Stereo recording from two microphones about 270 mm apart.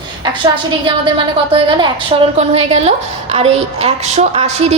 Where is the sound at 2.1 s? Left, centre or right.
Centre.